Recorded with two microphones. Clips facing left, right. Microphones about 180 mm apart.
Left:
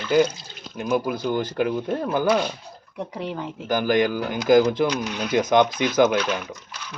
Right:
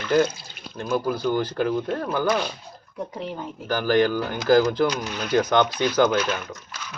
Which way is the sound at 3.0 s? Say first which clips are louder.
Left 1 dB; 70° left (ahead or behind).